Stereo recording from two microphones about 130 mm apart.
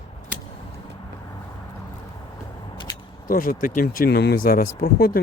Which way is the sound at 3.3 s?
90° left.